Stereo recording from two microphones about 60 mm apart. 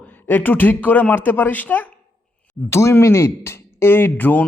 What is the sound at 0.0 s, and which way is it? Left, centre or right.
Speech, left.